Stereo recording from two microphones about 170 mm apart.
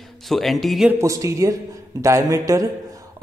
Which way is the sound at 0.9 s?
15° right (ahead or behind).